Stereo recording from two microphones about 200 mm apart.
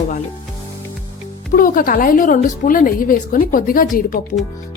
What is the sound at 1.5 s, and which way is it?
A woman's voice, 45° left (ahead or behind).